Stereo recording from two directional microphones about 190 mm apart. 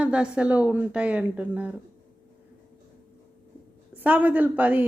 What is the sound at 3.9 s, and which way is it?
Speech, 10° right (ahead or behind).